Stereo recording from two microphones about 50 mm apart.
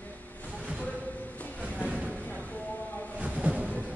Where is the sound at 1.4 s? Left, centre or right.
Left.